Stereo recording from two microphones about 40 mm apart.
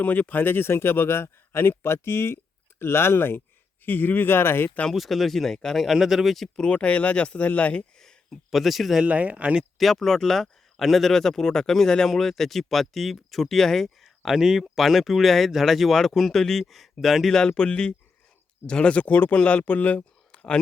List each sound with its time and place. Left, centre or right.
0.0 s speech: left
0.4 s speech: left
3.8 s speech: left
4.9 s speech: centre
5.7 s speech: centre
6.6 s speech: left
7.4 s speech: left
8.3 s speech: centre
9.0 s speech: right
9.7 s speech: centre
14.3 s speech: centre
17.3 s speech: centre
19.0 s speech: left
20.3 s a sound: left